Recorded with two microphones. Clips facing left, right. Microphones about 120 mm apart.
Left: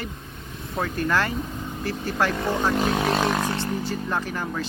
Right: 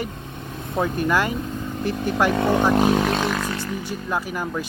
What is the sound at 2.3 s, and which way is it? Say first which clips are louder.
Speech: right 6 dB; 65° right (ahead or behind).